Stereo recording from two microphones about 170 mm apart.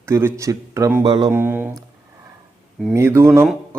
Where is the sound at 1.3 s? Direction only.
10° right (ahead or behind).